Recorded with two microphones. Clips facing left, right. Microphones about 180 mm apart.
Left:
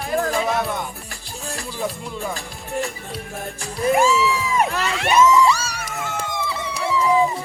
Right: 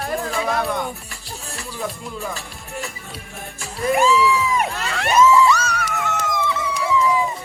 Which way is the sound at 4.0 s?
30° left (ahead or behind).